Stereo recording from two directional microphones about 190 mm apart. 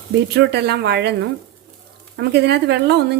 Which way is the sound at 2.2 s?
60° right (ahead or behind).